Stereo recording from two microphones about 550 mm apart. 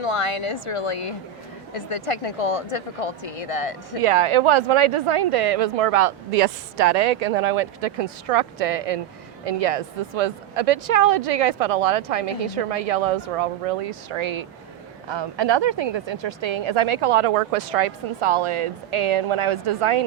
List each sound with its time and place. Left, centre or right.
0.0 s speech: left
4.0 s a woman's voice: right
7.3 s a woman's voice: right